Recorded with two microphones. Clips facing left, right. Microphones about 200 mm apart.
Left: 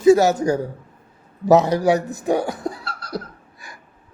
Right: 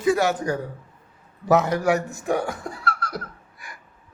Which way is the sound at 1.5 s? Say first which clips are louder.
Left 4 dB; 35° left (ahead or behind).